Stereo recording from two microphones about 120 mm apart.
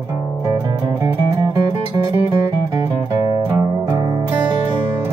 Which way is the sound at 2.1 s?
25° right (ahead or behind).